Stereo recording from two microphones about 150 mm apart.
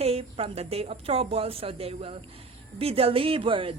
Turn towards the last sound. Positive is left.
turn(degrees=-35)  # may be behind; listen again after turning